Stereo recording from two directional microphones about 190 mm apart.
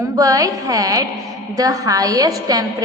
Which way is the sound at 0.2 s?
15° right (ahead or behind).